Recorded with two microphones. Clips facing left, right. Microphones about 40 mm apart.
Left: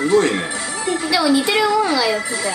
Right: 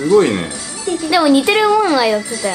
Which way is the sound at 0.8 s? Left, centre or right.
Centre.